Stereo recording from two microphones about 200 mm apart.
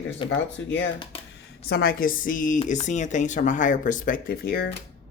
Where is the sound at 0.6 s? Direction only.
65° left (ahead or behind).